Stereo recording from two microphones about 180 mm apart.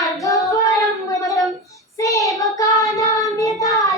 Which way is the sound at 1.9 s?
15° left (ahead or behind).